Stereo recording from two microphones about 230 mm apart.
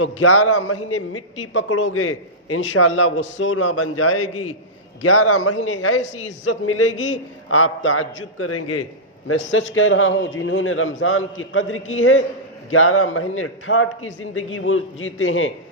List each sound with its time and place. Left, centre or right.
0.0 s a man's voice: left